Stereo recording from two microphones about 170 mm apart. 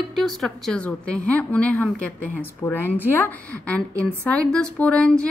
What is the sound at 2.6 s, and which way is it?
A woman's voice, 20° left (ahead or behind).